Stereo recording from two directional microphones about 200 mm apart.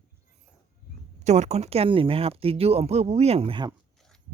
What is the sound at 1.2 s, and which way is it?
Speech, 35° right (ahead or behind).